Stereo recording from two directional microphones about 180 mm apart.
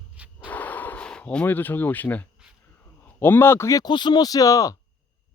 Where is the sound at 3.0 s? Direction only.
10° left (ahead or behind).